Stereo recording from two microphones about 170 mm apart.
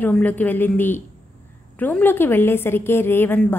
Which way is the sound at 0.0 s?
10° left (ahead or behind).